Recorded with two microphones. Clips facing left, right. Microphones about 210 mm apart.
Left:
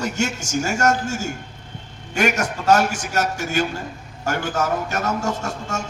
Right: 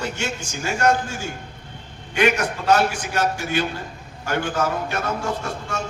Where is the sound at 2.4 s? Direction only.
45° left (ahead or behind).